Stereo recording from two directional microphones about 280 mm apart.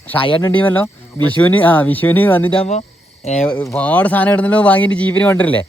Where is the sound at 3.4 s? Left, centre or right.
Centre.